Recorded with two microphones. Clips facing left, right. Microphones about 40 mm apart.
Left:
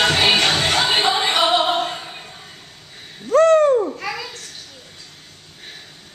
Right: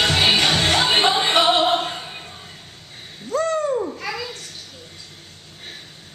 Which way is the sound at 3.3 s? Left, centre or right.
Left.